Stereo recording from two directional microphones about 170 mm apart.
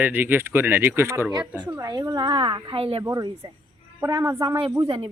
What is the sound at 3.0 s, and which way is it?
A woman's voice, 20° right (ahead or behind).